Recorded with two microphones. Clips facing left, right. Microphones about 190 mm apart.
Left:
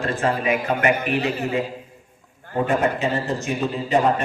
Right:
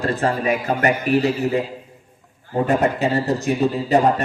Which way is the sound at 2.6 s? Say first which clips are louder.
Right 3 dB; 35° right (ahead or behind).